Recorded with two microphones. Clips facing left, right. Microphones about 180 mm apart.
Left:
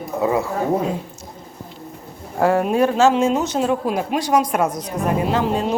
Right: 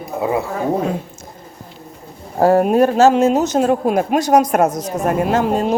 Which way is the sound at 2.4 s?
40° right (ahead or behind).